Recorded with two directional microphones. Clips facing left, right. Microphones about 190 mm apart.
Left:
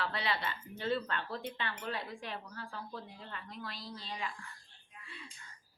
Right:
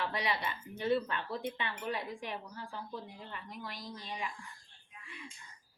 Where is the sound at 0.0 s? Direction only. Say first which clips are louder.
Right 1 dB; 15° right (ahead or behind).